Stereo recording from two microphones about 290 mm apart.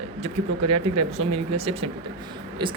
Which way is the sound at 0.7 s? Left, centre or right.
Centre.